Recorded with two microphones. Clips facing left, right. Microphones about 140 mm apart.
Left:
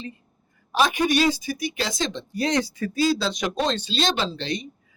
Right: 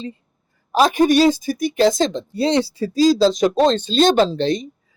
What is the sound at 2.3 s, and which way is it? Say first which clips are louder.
Speech: right 6 dB; 30° right (ahead or behind).